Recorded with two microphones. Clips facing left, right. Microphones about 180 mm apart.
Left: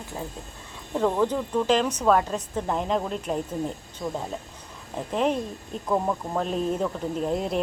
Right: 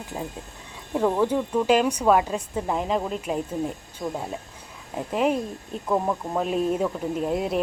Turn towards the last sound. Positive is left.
turn(degrees=-5)  # may be behind; listen again after turning